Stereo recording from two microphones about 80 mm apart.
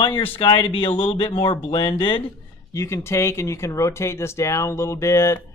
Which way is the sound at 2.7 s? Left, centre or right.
Left.